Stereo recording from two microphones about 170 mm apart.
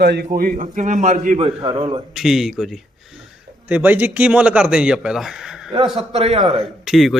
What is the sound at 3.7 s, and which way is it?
Speech, 10° right (ahead or behind).